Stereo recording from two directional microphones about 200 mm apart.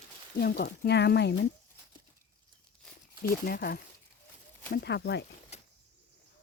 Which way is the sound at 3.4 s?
50° left (ahead or behind).